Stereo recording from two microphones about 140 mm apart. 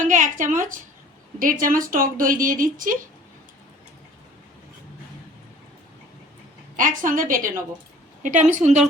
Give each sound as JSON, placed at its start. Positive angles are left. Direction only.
{"t": 0.0, "sound": "a woman's voice", "side_deg": -65}
{"t": 1.4, "sound": "a woman's voice", "side_deg": -80}
{"t": 6.7, "sound": "a woman's voice", "side_deg": -70}
{"t": 8.2, "sound": "a woman's voice", "side_deg": -60}